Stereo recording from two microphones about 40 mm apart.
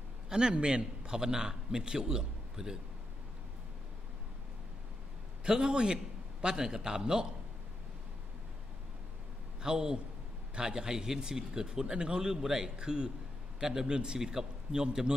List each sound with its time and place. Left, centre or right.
0.3 s a man's voice: right
5.4 s a man's voice: right
9.6 s a man's voice: centre